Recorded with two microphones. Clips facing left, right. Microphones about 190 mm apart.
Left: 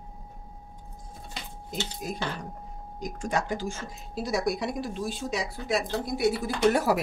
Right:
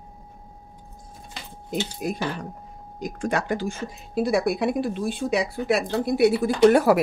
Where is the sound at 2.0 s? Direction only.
65° right (ahead or behind).